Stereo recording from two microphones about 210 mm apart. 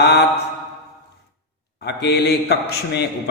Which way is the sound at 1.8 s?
50° left (ahead or behind).